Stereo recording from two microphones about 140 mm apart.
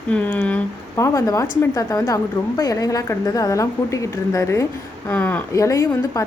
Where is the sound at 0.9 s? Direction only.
20° left (ahead or behind).